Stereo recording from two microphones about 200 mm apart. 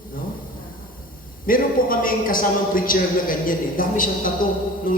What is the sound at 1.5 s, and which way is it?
A man's voice, 45° left (ahead or behind).